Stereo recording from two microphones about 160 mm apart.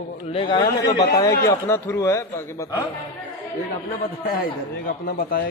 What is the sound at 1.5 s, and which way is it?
A man's voice, 15° left (ahead or behind).